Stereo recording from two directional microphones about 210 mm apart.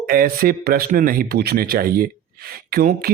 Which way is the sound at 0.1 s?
45° right (ahead or behind).